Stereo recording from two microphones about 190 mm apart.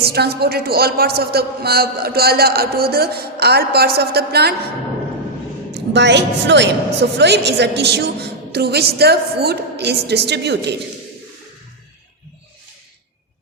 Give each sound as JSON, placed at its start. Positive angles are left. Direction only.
{"t": 0.0, "sound": "a man's voice", "side_deg": -55}
{"t": 5.7, "sound": "a woman's voice", "side_deg": -65}